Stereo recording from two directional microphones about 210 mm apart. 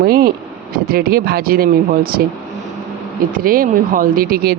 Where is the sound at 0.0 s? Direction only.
45° right (ahead or behind).